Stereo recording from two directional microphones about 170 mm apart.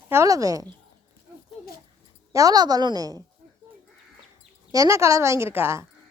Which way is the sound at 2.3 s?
20° right (ahead or behind).